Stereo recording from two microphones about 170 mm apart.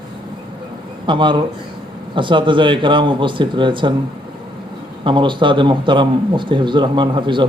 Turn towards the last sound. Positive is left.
turn(degrees=-30)  # may be behind; listen again after turning